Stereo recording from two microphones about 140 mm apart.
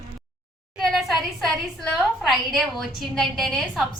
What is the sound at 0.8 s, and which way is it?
A woman's voice, centre (ahead or behind).